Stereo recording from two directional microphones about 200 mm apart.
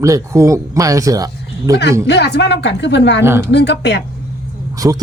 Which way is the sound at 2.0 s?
60° left (ahead or behind).